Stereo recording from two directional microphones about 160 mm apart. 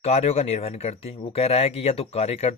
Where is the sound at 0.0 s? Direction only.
40° left (ahead or behind).